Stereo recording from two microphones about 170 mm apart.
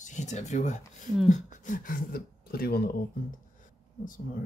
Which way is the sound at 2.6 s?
65° left (ahead or behind).